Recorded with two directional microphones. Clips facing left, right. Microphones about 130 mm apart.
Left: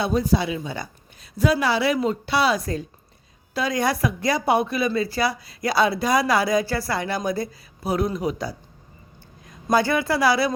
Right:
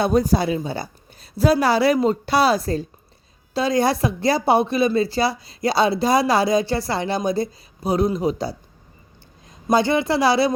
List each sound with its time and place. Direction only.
0.0 s a woman's voice: 45° right (ahead or behind); by 8.5 s 25° right (ahead or behind)
9.6 s a woman's voice: 20° right (ahead or behind)